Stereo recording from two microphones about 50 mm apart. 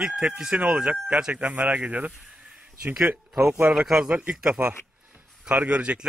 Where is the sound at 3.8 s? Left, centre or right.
Centre.